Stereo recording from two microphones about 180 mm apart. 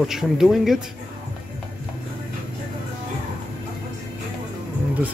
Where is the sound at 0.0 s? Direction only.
Centre (ahead or behind).